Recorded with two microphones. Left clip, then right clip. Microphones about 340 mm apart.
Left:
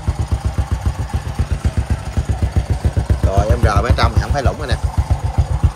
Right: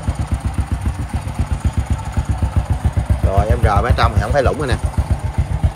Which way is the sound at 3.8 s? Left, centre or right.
Centre.